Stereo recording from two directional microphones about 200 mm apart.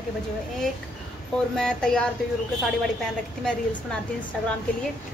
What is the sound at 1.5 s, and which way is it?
Speech, 5° left (ahead or behind).